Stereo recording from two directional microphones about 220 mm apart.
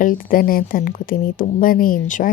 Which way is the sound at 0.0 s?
40° left (ahead or behind).